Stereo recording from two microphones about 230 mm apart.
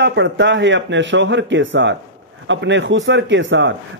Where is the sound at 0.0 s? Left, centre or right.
Right.